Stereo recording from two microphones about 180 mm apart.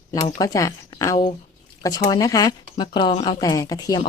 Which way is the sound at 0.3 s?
20° left (ahead or behind).